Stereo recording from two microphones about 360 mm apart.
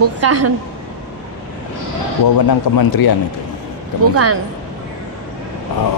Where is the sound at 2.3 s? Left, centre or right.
Left.